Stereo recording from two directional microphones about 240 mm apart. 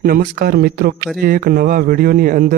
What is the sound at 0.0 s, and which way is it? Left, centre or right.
A man's voice, right.